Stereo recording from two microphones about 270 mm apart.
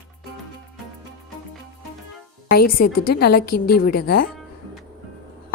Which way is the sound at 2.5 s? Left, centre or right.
Left.